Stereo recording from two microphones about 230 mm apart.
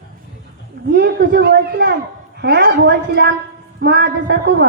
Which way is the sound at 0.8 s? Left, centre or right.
Right.